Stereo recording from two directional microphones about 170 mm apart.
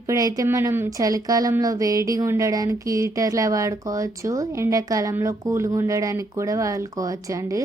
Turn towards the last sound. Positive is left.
turn(degrees=-20)  # may be behind; listen again after turning